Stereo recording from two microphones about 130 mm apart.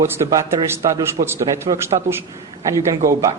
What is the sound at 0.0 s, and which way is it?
Speech, 25° right (ahead or behind).